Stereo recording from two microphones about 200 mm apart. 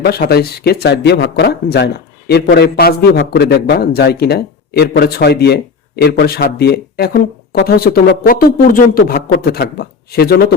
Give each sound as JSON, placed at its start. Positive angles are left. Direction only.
{"t": 0.0, "sound": "speech", "side_deg": 50}